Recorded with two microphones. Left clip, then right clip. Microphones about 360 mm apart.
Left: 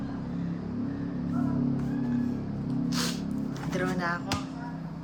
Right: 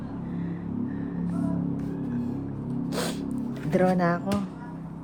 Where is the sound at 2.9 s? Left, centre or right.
Centre.